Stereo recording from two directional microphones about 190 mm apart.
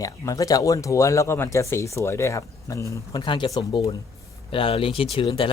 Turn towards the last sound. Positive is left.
turn(degrees=25)  # may be behind; listen again after turning